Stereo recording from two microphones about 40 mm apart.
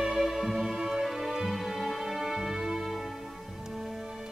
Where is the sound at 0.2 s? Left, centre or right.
Centre.